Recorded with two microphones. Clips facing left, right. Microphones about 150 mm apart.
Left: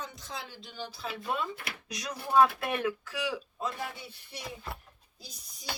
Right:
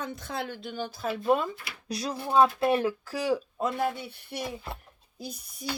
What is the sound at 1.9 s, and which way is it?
Speech, 30° right (ahead or behind).